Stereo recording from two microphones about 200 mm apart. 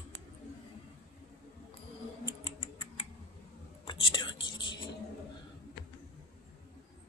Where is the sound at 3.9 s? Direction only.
25° left (ahead or behind).